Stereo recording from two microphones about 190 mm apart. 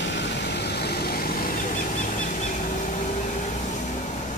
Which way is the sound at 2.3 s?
40° left (ahead or behind).